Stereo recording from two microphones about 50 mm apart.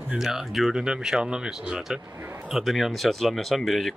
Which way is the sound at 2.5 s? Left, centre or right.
Centre.